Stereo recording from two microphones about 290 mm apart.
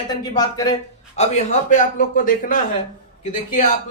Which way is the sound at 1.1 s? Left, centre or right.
Left.